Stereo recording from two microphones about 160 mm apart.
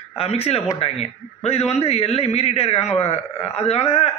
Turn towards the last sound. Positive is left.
turn(degrees=40)  # may be behind; listen again after turning